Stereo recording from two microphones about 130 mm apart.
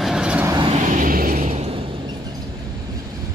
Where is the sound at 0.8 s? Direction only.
85° right.